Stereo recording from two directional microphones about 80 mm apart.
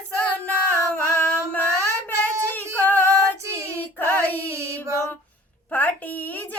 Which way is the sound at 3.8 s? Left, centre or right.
Left.